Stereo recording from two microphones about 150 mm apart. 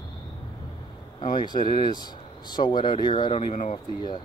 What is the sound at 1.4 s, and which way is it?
Speech, 30° left (ahead or behind).